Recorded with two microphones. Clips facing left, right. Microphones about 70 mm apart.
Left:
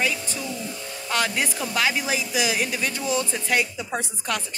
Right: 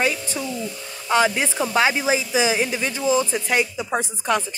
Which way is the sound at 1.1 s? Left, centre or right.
Centre.